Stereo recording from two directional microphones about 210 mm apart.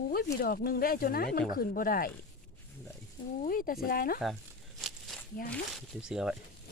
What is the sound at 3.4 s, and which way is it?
Speech, 40° left (ahead or behind).